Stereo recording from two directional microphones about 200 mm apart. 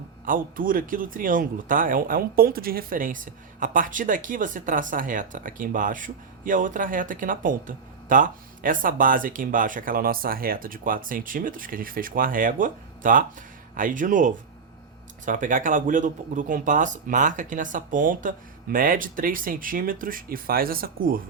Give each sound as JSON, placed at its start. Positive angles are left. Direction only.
{"t": 0.3, "sound": "speech", "side_deg": -45}